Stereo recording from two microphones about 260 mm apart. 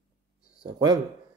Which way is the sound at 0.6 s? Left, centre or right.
Centre.